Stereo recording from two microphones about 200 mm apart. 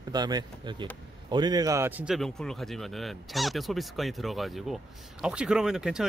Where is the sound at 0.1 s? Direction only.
20° right (ahead or behind).